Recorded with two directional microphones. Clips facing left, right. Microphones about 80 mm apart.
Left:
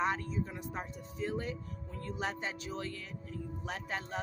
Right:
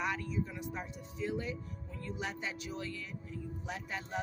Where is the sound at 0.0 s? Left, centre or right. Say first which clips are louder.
Left 2 dB; left.